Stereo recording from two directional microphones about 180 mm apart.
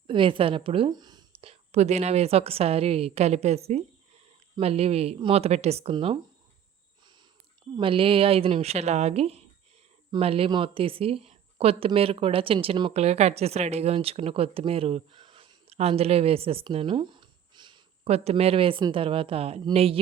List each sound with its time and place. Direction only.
0.1 s speech: 30° right (ahead or behind)
7.8 s speech: 30° right (ahead or behind)